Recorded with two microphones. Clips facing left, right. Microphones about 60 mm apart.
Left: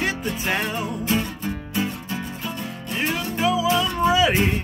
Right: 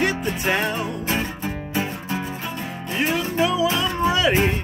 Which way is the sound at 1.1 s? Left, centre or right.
Right.